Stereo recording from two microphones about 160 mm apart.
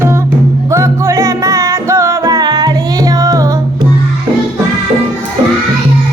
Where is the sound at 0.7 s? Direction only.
20° right (ahead or behind).